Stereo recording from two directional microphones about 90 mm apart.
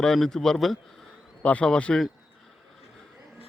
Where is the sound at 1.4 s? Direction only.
15° left (ahead or behind).